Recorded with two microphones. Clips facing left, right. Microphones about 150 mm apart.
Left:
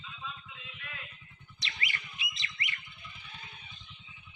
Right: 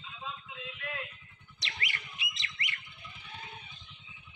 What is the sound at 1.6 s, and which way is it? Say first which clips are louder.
Music: even; 75° right (ahead or behind).